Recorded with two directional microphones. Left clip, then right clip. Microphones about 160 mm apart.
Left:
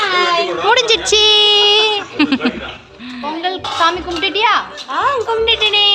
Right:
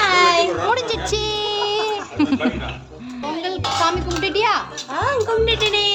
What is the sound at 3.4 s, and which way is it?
Music, 10° left (ahead or behind).